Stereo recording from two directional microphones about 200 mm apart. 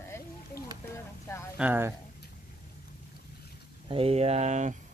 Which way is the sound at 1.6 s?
10° right (ahead or behind).